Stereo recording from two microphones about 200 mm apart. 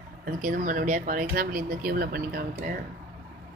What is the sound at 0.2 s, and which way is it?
Speech, 45° right (ahead or behind).